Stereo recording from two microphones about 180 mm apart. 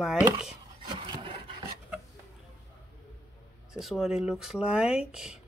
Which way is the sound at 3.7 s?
Centre (ahead or behind).